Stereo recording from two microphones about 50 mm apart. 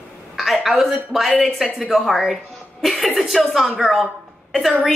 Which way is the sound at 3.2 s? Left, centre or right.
Centre.